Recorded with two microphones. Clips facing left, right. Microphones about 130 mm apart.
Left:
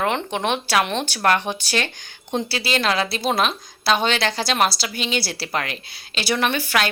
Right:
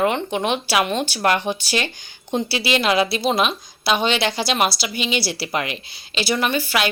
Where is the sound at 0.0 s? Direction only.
5° right (ahead or behind).